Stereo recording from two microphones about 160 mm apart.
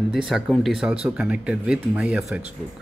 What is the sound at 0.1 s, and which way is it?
Speech, centre (ahead or behind).